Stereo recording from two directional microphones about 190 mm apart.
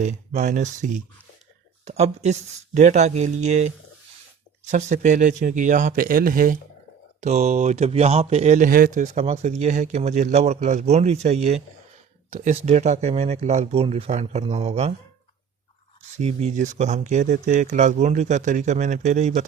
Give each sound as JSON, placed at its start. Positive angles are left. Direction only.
{"t": 0.0, "sound": "speech", "side_deg": -40}
{"t": 7.2, "sound": "speech", "side_deg": -35}
{"t": 16.1, "sound": "speech", "side_deg": -35}